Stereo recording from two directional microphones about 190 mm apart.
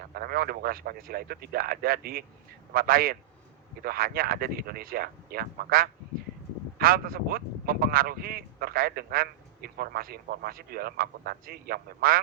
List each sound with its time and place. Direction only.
0.1 s speech: 50° right (ahead or behind)